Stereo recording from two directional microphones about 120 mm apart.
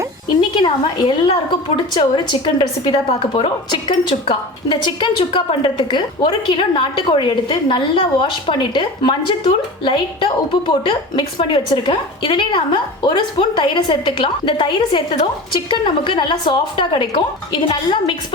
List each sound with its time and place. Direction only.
0.5 s a woman's voice: 45° left (ahead or behind)